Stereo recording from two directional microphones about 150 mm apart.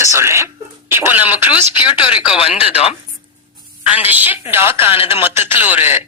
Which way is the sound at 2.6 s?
40° left (ahead or behind).